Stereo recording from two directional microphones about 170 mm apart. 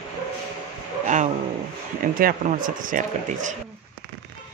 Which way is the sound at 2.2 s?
55° right (ahead or behind).